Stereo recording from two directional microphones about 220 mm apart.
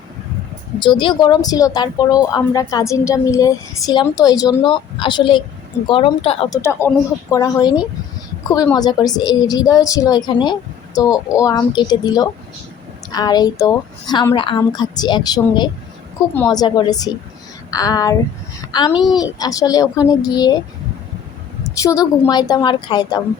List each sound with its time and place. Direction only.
0.8 s a woman's voice: 20° left (ahead or behind)
6.6 s a woman's voice: 10° left (ahead or behind)
21.6 s a woman's voice: 15° left (ahead or behind)